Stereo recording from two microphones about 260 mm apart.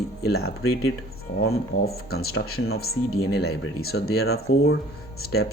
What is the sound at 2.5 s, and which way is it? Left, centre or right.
Speech, left.